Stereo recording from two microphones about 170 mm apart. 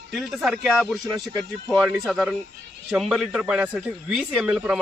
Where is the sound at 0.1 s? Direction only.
Centre (ahead or behind).